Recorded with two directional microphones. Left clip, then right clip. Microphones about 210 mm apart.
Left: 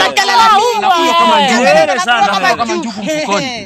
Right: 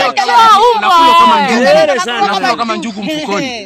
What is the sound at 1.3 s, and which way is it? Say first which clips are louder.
Speech: even; 15° left (ahead or behind).